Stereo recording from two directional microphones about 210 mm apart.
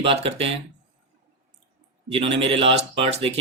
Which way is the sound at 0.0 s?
25° right (ahead or behind).